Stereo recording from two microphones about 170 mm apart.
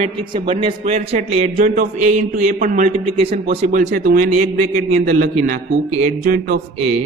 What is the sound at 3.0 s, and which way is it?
A man's voice, 35° right (ahead or behind).